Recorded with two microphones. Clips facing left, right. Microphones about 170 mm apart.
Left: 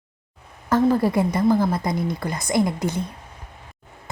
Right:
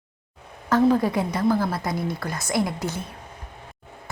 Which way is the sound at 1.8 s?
5° right (ahead or behind).